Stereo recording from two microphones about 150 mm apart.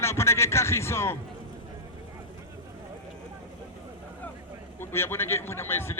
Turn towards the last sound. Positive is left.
turn(degrees=15)  # may be behind; listen again after turning